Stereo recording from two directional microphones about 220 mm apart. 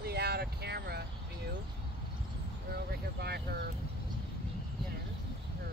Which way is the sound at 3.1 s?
45° right (ahead or behind).